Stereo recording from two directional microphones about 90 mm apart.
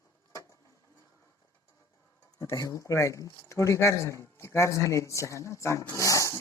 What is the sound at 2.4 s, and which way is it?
Speech, 35° left (ahead or behind).